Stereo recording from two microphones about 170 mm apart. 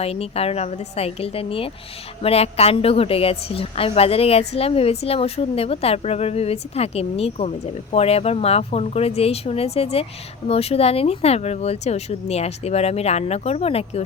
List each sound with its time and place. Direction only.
0.0 s a woman's voice: 35° left (ahead or behind)